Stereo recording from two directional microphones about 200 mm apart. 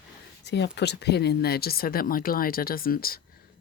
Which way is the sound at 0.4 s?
60° left (ahead or behind).